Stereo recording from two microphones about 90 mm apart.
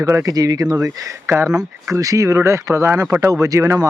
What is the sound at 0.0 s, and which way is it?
Speech, 35° right (ahead or behind).